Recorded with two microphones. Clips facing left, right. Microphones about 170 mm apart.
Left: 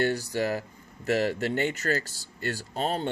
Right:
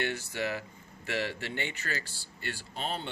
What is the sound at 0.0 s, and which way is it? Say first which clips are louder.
Speech: left 7 dB; 40° left (ahead or behind).